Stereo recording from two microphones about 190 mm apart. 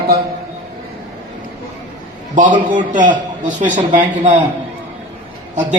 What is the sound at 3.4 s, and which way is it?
Speech, 40° right (ahead or behind).